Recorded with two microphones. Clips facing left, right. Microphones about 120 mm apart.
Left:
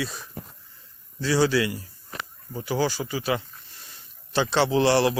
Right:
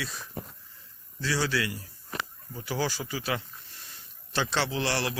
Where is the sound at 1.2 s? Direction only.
20° left (ahead or behind).